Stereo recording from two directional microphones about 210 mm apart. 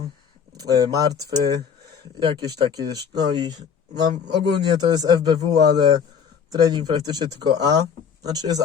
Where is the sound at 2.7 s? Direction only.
20° right (ahead or behind).